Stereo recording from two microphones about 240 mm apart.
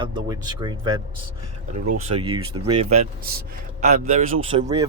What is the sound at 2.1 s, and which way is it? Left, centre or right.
Speech, right.